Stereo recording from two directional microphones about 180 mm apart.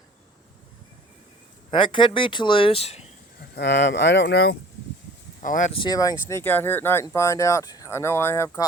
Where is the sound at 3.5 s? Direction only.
70° left (ahead or behind).